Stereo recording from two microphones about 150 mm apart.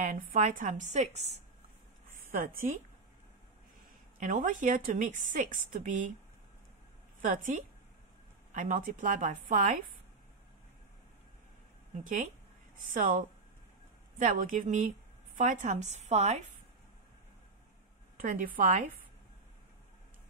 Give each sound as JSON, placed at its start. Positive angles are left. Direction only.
{"t": 0.0, "sound": "a woman's voice", "side_deg": -60}
{"t": 4.2, "sound": "a woman's voice", "side_deg": -60}
{"t": 7.2, "sound": "a woman's voice", "side_deg": -55}
{"t": 12.0, "sound": "a woman's voice", "side_deg": -60}
{"t": 18.2, "sound": "a woman's voice", "side_deg": -65}